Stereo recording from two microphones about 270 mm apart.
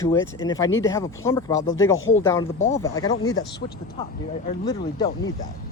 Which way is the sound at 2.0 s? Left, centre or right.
Left.